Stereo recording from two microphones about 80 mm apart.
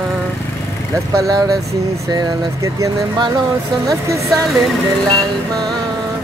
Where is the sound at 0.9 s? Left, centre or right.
Right.